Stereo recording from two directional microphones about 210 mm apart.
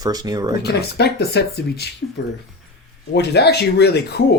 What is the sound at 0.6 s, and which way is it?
Speech, 50° left (ahead or behind).